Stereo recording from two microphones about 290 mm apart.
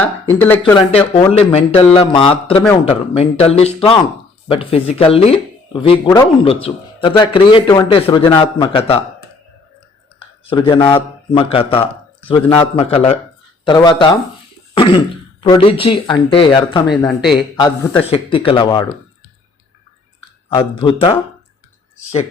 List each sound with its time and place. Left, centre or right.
0.0 s speech: centre
10.2 s speech: centre
17.1 s a man's voice: centre
17.6 s speech: centre
20.5 s speech: centre